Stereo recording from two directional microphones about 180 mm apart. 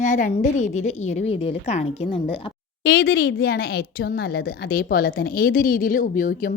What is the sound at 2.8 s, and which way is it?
Speech, 60° left (ahead or behind).